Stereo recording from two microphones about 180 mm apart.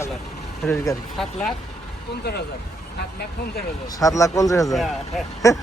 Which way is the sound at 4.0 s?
20° left (ahead or behind).